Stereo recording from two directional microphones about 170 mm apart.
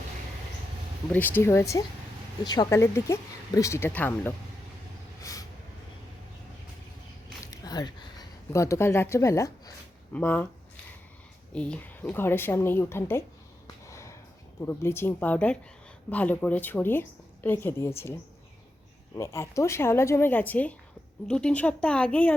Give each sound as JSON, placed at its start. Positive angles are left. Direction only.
{"t": 1.1, "sound": "a woman's voice", "side_deg": 10}
{"t": 5.2, "sound": "vehicle", "side_deg": 20}
{"t": 7.4, "sound": "a sound", "side_deg": 20}
{"t": 11.5, "sound": "a woman's voice", "side_deg": 5}
{"t": 13.8, "sound": "a sound", "side_deg": 15}
{"t": 14.6, "sound": "a woman's voice", "side_deg": 15}
{"t": 19.1, "sound": "a woman's voice", "side_deg": 15}